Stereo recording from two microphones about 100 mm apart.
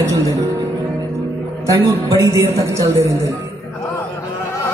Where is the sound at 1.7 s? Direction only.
30° right (ahead or behind).